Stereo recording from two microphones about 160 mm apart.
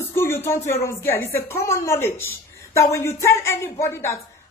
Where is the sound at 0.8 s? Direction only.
15° left (ahead or behind).